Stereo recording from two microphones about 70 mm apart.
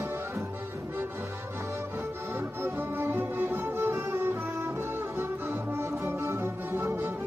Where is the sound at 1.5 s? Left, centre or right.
Right.